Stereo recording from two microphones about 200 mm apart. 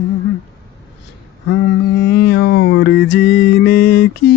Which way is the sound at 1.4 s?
65° left (ahead or behind).